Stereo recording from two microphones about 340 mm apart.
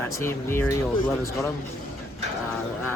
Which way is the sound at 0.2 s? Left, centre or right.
Centre.